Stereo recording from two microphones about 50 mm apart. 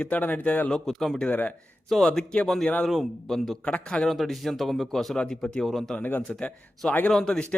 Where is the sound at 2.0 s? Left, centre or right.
Centre.